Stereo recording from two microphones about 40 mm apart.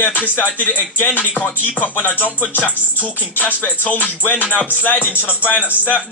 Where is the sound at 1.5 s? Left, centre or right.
Left.